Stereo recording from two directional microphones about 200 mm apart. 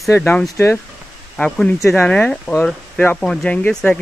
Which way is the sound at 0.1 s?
10° left (ahead or behind).